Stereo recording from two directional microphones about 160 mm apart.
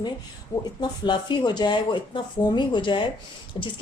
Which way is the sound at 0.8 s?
30° left (ahead or behind).